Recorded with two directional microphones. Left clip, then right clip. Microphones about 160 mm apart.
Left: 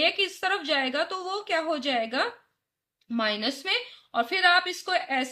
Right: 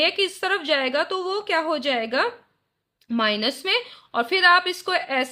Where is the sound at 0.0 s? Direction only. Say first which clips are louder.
Right 3 dB; 40° right (ahead or behind).